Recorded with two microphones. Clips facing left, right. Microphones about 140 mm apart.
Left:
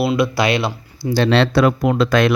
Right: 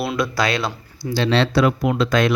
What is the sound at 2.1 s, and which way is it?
Speech, 70° left (ahead or behind).